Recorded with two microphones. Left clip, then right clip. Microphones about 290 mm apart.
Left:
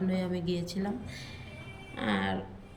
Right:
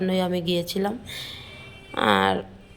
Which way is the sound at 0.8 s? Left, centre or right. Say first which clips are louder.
Right 10 dB; right.